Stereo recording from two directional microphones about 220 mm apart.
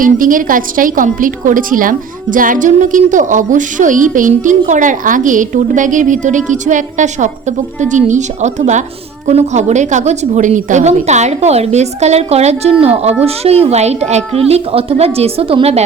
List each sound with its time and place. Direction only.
0.0 s a woman's voice: 40° right (ahead or behind)